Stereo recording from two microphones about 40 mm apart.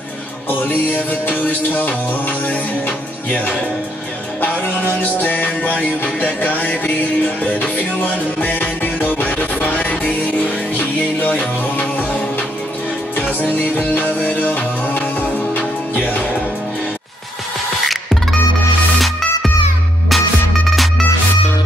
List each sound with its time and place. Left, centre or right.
0.7 s music: left
1.9 s music: left
5.0 s music: left
11.1 s music: left
13.2 s music: left
18.9 s music: centre